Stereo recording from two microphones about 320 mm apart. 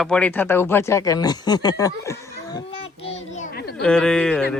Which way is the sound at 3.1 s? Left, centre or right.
Left.